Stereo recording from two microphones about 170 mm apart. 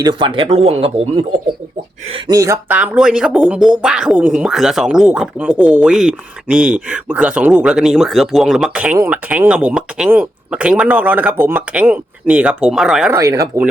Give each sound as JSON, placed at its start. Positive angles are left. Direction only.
{"t": 0.0, "sound": "speech", "side_deg": -30}
{"t": 2.1, "sound": "speech", "side_deg": -25}
{"t": 13.1, "sound": "speech", "side_deg": -20}